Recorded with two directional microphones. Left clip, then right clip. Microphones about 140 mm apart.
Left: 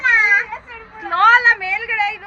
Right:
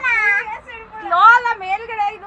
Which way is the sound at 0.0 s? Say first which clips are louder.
Left 3 dB; 50° left (ahead or behind).